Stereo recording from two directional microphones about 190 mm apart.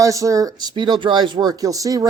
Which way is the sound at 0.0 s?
15° right (ahead or behind).